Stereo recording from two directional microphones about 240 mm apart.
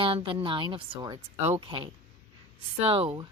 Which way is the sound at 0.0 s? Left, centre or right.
Right.